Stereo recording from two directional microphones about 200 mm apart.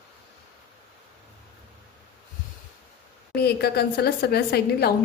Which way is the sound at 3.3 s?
50° left (ahead or behind).